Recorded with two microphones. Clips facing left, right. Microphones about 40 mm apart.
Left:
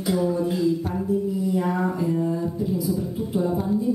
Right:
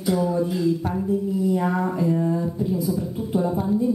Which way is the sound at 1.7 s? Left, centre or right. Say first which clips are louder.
Right 1 dB; centre.